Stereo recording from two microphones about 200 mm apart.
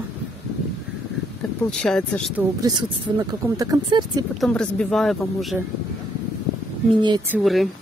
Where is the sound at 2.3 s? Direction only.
20° right (ahead or behind).